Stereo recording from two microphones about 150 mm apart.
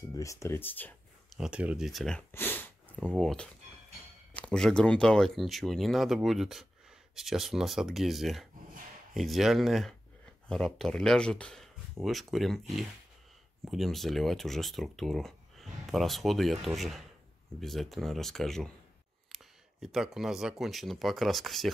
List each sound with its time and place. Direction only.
0.1 s speech: 20° left (ahead or behind)
1.3 s speech: 5° right (ahead or behind)
2.3 s speech: 15° left (ahead or behind)